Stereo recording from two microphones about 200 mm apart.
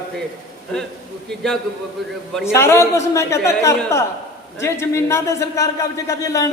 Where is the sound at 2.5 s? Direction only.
15° left (ahead or behind).